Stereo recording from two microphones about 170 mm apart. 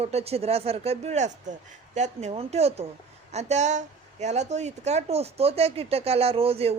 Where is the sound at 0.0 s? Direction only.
35° right (ahead or behind).